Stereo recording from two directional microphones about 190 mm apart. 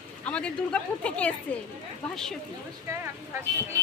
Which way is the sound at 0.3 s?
5° left (ahead or behind).